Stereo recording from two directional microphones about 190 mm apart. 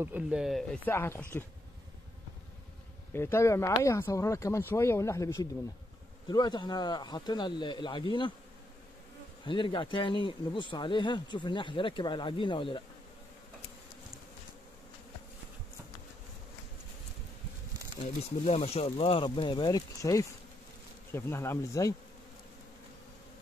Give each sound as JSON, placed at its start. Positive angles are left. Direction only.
{"t": 0.0, "sound": "speech", "side_deg": -5}
{"t": 3.1, "sound": "speech", "side_deg": 10}
{"t": 9.4, "sound": "speech", "side_deg": 25}
{"t": 18.0, "sound": "speech", "side_deg": 35}